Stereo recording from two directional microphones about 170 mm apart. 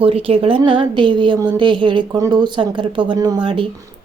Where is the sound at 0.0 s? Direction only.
35° right (ahead or behind).